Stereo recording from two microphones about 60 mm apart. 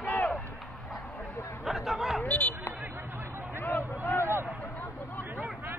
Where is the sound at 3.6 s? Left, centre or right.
Left.